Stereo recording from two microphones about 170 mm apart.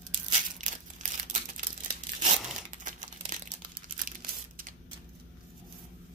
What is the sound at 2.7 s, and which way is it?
Crumpling, 50° right (ahead or behind).